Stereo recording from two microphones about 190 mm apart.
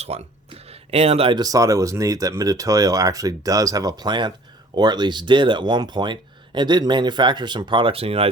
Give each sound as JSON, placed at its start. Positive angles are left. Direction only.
{"t": 0.1, "sound": "speech", "side_deg": -35}